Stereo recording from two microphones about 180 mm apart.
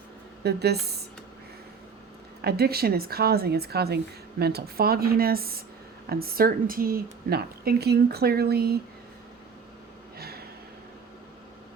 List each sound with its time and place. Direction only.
0.4 s a woman's voice: 65° right (ahead or behind)
2.4 s a woman's voice: 60° right (ahead or behind)
10.2 s a sound: 60° right (ahead or behind)